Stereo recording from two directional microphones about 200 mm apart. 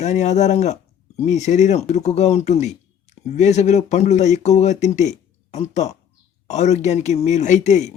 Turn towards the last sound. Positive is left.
turn(degrees=35)  # may be behind; listen again after turning